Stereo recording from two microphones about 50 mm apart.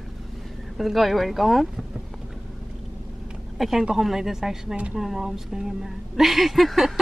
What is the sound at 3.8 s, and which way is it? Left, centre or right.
A woman's voice, centre.